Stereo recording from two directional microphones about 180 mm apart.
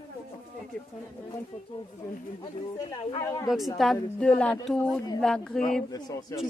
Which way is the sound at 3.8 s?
5° left (ahead or behind).